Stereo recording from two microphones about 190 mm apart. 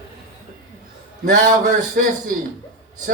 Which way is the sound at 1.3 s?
40° right (ahead or behind).